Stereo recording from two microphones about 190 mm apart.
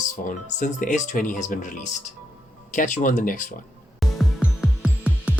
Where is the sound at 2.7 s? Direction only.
45° left (ahead or behind).